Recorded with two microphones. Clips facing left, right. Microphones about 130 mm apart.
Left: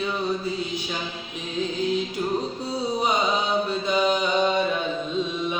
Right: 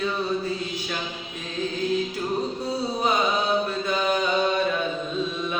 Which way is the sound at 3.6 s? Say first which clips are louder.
Left 2 dB; 15° left (ahead or behind).